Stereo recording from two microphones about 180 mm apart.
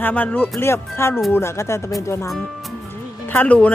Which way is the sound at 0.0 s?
10° left (ahead or behind).